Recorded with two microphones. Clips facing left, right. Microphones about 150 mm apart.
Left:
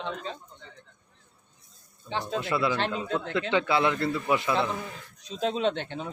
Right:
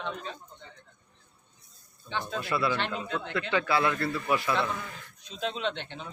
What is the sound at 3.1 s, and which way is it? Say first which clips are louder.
Speech: left 4 dB; 35° left (ahead or behind).